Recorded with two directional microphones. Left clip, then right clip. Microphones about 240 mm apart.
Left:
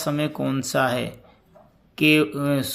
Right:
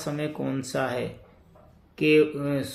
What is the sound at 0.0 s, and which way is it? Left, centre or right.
Speech, left.